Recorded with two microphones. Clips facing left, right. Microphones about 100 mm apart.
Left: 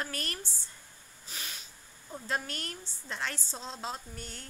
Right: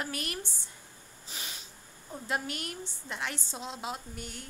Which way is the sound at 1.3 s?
20° right (ahead or behind).